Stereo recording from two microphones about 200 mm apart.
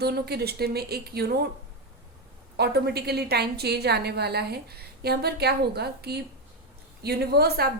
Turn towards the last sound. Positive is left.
turn(degrees=-50)  # may be behind; listen again after turning